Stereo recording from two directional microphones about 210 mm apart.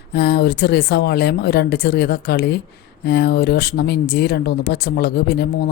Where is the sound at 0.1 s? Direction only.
50° left (ahead or behind).